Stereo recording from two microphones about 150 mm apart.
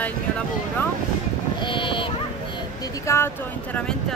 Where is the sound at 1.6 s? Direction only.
35° left (ahead or behind).